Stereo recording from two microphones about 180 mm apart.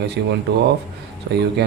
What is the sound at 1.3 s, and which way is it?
Speech, 75° right (ahead or behind).